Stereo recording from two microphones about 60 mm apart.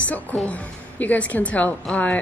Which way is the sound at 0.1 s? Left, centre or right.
Left.